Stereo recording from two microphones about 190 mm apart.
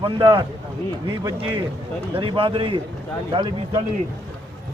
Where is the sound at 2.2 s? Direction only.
25° right (ahead or behind).